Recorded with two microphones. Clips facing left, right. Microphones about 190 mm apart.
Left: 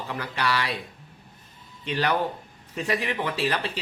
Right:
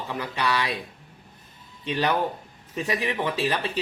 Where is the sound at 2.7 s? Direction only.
15° right (ahead or behind).